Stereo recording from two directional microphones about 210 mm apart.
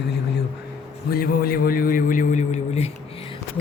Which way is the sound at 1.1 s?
45° left (ahead or behind).